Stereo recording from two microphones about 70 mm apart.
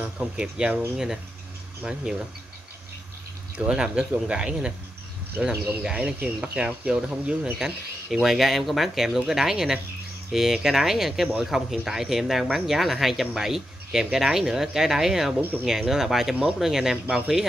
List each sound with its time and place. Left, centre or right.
0.4 s speech: centre
3.5 s speech: centre
7.5 s speech: centre